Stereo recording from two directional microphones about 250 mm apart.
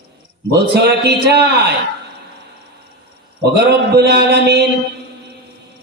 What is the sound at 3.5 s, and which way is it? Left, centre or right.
A man's voice, right.